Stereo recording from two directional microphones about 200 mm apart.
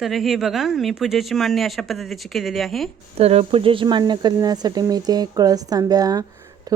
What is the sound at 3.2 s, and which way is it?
Speech, 30° right (ahead or behind).